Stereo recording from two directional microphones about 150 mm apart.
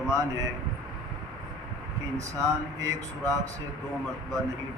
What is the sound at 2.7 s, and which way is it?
Speech, 20° right (ahead or behind).